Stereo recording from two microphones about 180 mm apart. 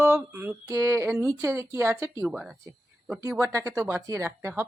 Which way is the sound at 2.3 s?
5° right (ahead or behind).